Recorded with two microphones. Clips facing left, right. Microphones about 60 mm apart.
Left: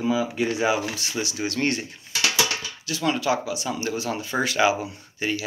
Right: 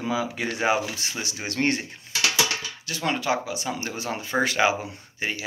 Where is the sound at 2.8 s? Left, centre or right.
Right.